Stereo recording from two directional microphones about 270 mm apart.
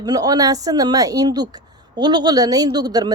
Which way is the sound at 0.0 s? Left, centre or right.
Centre.